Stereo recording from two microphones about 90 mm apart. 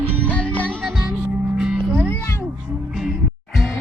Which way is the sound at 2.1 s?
25° left (ahead or behind).